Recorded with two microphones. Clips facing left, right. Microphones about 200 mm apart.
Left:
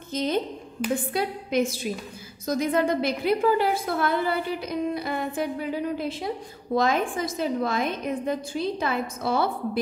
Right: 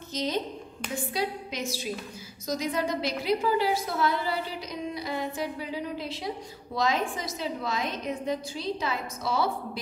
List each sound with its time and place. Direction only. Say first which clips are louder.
0.1 s a woman's voice: left 4 dB; 55° left (ahead or behind)
0.8 s a woman's voice: left 10 dB; 5° left (ahead or behind)
1.1 s a woman's voice: left 5 dB; 55° left (ahead or behind)